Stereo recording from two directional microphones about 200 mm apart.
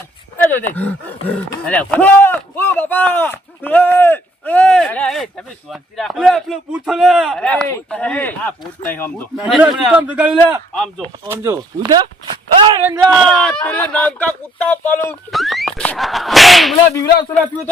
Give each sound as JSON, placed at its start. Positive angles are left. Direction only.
{"t": 0.5, "sound": "speech", "side_deg": 10}
{"t": 9.5, "sound": "a man's voice", "side_deg": -5}
{"t": 10.7, "sound": "speech", "side_deg": 5}
{"t": 11.3, "sound": "a man's voice", "side_deg": -15}
{"t": 13.1, "sound": "speech", "side_deg": 5}